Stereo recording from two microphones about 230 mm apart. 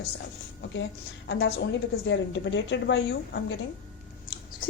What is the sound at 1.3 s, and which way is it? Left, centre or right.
A woman's voice, left.